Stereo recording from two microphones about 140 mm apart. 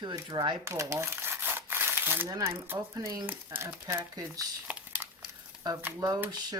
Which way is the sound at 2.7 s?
25° right (ahead or behind).